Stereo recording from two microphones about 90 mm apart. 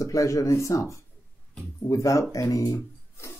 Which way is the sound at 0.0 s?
40° left (ahead or behind).